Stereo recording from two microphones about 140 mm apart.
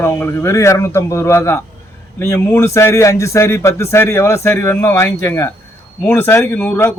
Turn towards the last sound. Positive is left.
turn(degrees=15)  # may be behind; listen again after turning